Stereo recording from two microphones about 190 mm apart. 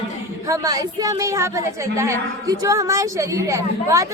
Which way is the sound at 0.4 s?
15° right (ahead or behind).